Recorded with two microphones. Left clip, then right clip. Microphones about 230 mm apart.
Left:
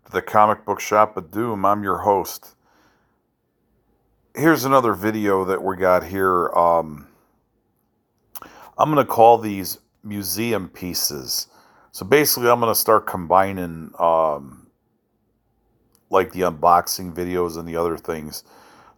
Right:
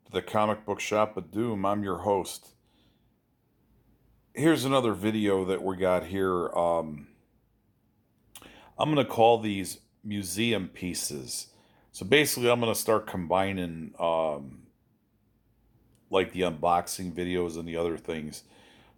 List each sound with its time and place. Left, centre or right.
0.0 s speech: centre
4.3 s speech: centre
8.3 s speech: centre
16.0 s speech: centre